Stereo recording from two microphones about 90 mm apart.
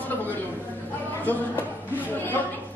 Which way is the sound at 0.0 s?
20° left (ahead or behind).